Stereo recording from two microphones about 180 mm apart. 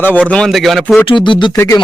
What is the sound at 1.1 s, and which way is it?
Speech, 25° left (ahead or behind).